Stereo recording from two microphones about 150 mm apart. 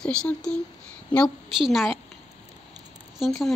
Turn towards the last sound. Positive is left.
turn(degrees=0)  # may be behind; listen again after turning